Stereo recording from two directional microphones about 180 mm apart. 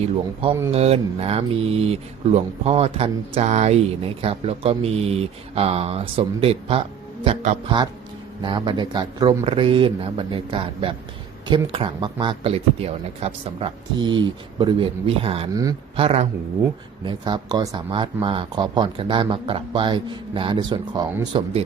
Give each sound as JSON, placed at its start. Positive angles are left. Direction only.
{"t": 0.7, "sound": "speech", "side_deg": -35}
{"t": 8.4, "sound": "speech", "side_deg": -25}